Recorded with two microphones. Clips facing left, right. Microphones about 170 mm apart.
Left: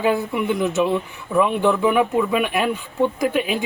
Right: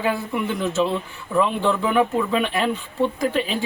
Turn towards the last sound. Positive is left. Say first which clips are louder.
# left 2 dB
turn(degrees=15)  # may be behind; listen again after turning